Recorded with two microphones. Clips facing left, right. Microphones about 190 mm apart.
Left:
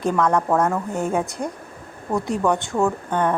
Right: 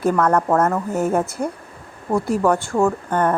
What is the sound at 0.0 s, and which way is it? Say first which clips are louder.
A woman's voice: right 2 dB; 5° right (ahead or behind).